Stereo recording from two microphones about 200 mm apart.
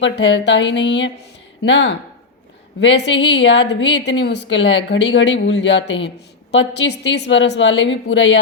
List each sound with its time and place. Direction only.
0.0 s a woman's voice: 65° left (ahead or behind)